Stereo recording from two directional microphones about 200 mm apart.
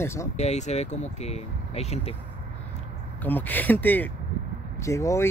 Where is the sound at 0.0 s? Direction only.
15° left (ahead or behind).